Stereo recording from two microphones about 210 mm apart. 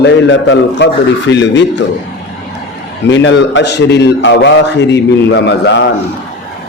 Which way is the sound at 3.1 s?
60° left (ahead or behind).